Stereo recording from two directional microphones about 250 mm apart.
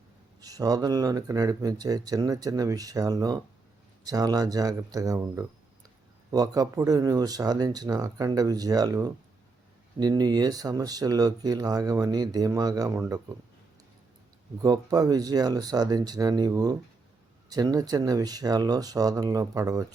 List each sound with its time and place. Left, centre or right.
0.3 s speech: centre
14.6 s speech: centre